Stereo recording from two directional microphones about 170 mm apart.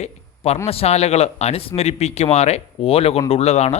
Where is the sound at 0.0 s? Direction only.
40° left (ahead or behind).